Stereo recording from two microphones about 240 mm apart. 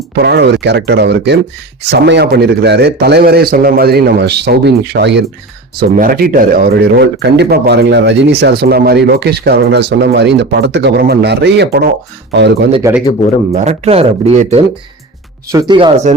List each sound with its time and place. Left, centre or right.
0.2 s speech: right
12.8 s speech: centre
13.5 s speech: right